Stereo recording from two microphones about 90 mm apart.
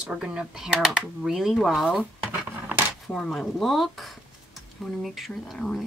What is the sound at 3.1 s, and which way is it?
Speech, 5° left (ahead or behind).